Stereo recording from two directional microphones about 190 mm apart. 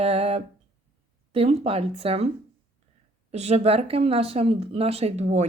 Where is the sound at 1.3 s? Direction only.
30° right (ahead or behind).